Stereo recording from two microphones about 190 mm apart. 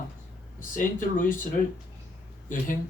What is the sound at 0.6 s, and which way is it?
Speech, 45° left (ahead or behind).